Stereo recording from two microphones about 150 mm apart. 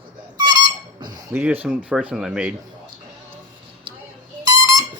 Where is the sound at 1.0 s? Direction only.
25° right (ahead or behind).